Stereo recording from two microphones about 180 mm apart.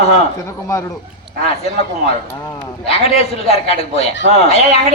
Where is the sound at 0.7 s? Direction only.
20° left (ahead or behind).